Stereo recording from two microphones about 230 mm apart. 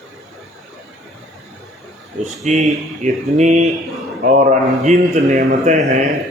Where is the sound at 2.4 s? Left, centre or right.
Right.